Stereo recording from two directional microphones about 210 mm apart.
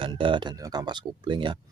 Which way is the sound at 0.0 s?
25° right (ahead or behind).